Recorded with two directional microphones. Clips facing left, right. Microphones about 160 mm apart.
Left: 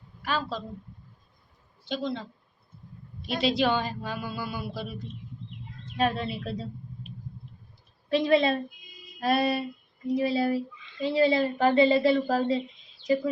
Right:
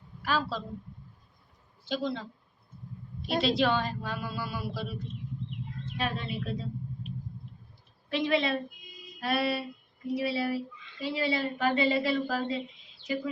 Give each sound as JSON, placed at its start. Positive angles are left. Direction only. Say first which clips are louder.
{"t": 0.2, "sound": "speech", "louder": "even", "side_deg": -5}
{"t": 1.9, "sound": "a woman's voice", "louder": "left 1 dB", "side_deg": -5}
{"t": 3.3, "sound": "a woman's voice", "louder": "left 1 dB", "side_deg": 0}
{"t": 6.0, "sound": "a woman's voice", "louder": "left 6 dB", "side_deg": 35}
{"t": 8.1, "sound": "a woman's voice", "louder": "left 5 dB", "side_deg": 35}